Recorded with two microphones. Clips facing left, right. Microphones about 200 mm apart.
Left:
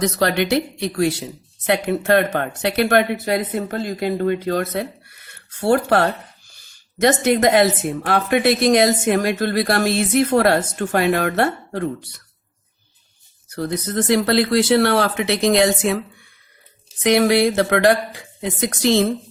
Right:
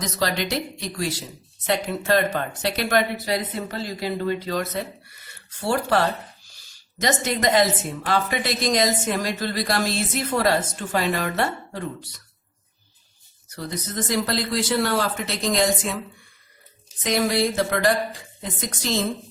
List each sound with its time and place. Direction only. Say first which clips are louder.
0.0 s speech: left 6 dB; 60° left (ahead or behind)
13.6 s speech: left 7 dB; 60° left (ahead or behind)
17.0 s speech: left 7 dB; 70° left (ahead or behind)